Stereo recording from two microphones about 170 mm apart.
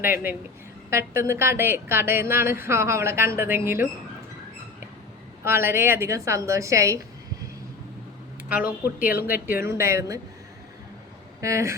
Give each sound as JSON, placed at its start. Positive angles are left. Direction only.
{"t": 0.0, "sound": "a woman's voice", "side_deg": -15}
{"t": 5.5, "sound": "a woman's voice", "side_deg": -15}
{"t": 8.4, "sound": "a woman's voice", "side_deg": -10}
{"t": 11.3, "sound": "speech", "side_deg": -15}